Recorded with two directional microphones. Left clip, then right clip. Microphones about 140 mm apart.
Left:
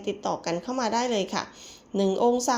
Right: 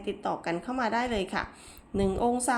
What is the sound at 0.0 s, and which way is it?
A woman's voice, 20° left (ahead or behind).